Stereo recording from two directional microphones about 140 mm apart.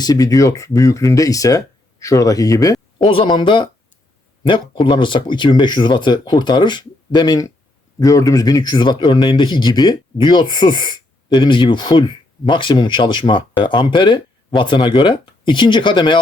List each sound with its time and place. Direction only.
0.0 s speech: 25° left (ahead or behind)
3.1 s speech: 35° left (ahead or behind)
4.7 s speech: 35° left (ahead or behind)